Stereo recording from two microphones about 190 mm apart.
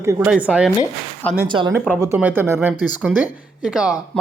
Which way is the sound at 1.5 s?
25° right (ahead or behind).